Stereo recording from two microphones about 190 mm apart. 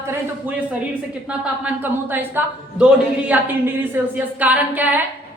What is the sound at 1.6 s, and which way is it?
A woman's voice, 10° right (ahead or behind).